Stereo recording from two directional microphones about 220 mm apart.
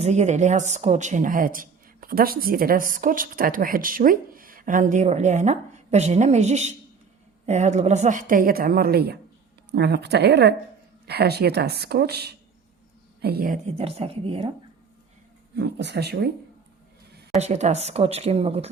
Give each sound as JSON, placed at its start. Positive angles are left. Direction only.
{"t": 0.0, "sound": "speech", "side_deg": -30}
{"t": 15.5, "sound": "speech", "side_deg": -50}
{"t": 17.3, "sound": "speech", "side_deg": -30}